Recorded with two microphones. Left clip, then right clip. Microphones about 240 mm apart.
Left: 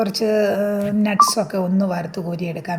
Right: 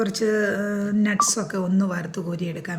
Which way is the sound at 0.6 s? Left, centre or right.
Left.